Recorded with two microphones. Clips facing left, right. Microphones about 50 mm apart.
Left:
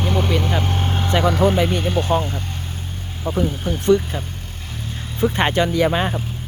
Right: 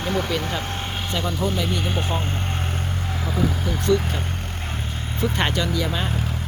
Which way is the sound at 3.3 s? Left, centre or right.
Left.